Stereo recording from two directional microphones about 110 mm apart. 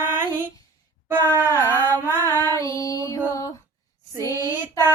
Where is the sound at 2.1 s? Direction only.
20° left (ahead or behind).